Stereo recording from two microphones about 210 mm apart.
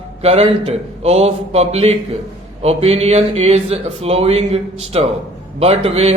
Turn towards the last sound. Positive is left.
turn(degrees=-30)  # may be behind; listen again after turning